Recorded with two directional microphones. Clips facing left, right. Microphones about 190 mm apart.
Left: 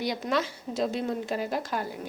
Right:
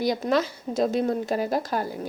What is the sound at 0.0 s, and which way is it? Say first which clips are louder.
Speech: right 5 dB; 40° right (ahead or behind).